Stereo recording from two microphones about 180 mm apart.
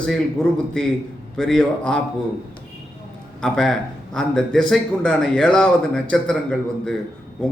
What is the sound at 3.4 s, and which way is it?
A man's voice, 5° left (ahead or behind).